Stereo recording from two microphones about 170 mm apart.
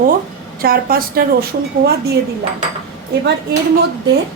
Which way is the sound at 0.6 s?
60° right (ahead or behind).